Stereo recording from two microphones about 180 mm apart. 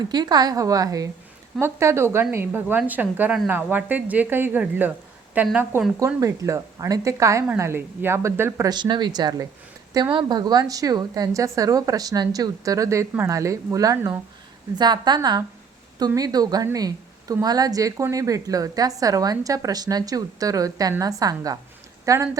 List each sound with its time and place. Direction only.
0.0 s a woman's voice: 25° right (ahead or behind)
8.7 s a woman's voice: 25° right (ahead or behind)